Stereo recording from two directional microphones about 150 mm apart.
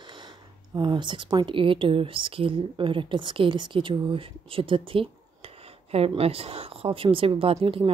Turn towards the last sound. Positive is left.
turn(degrees=-40)  # may be behind; listen again after turning